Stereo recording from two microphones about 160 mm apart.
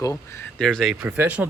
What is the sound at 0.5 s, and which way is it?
Speech, 5° left (ahead or behind).